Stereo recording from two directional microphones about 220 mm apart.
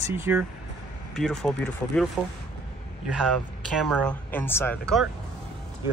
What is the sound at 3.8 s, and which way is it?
Speech, 5° left (ahead or behind).